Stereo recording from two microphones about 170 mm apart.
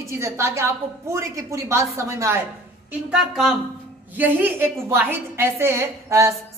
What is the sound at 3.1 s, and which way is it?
A woman's voice, centre (ahead or behind).